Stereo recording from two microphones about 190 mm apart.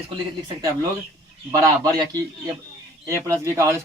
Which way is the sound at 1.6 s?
20° right (ahead or behind).